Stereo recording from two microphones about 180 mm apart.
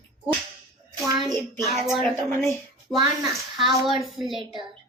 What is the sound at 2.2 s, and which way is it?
Speech, 15° left (ahead or behind).